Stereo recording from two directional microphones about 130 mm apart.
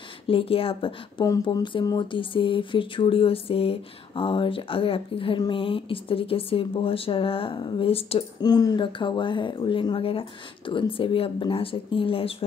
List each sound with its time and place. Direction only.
0.3 s speech: 45° left (ahead or behind)
1.2 s speech: 30° left (ahead or behind); by 8.3 s 50° left (ahead or behind)
8.4 s speech: 30° left (ahead or behind); by 12.4 s 45° left (ahead or behind)